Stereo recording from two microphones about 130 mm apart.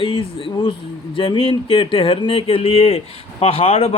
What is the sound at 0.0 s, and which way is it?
Speech, 40° left (ahead or behind).